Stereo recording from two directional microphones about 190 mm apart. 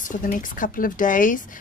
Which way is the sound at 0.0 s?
45° left (ahead or behind).